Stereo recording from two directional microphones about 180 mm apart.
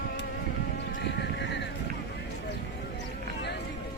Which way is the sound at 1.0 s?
70° left (ahead or behind).